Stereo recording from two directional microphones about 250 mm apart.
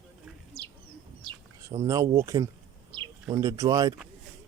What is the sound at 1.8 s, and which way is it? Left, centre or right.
Speech, centre.